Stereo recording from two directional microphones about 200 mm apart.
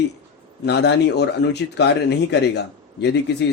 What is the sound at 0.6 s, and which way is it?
Speech, 60° left (ahead or behind).